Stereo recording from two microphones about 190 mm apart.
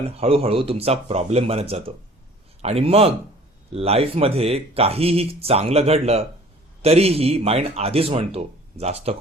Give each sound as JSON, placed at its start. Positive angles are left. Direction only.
{"t": 0.2, "sound": "speech", "side_deg": -30}